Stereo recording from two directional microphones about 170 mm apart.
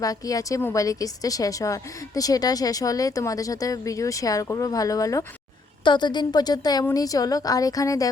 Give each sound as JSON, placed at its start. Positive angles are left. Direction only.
{"t": 0.0, "sound": "a woman's voice", "side_deg": 20}